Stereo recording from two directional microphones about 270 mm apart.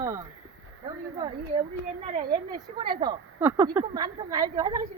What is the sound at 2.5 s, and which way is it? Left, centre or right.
Speech, centre.